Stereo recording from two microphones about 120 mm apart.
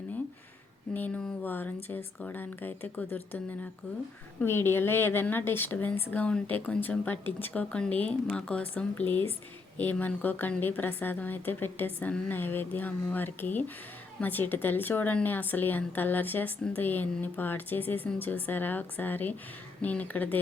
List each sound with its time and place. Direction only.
0.9 s a woman's voice: 10° left (ahead or behind)